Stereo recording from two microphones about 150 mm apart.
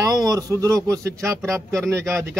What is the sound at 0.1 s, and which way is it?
A man's voice, 25° right (ahead or behind).